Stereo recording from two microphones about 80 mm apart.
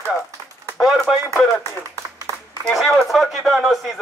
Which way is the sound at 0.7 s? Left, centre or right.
Centre.